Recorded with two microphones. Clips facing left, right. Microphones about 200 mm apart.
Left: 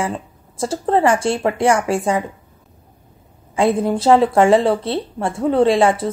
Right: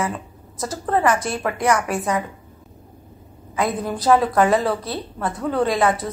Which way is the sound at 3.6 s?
25° left (ahead or behind).